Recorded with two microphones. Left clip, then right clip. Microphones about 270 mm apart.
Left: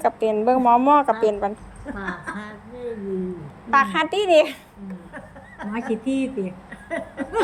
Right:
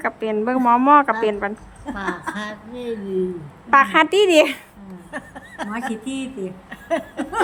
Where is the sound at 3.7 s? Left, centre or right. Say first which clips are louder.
Right 5 dB; centre.